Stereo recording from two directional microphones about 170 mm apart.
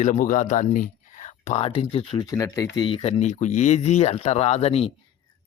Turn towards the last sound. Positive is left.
turn(degrees=35)  # may be behind; listen again after turning